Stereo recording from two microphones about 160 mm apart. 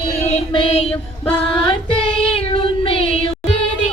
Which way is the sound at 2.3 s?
35° left (ahead or behind).